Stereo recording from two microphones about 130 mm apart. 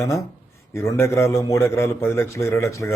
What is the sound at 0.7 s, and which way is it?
A man's voice, 20° left (ahead or behind).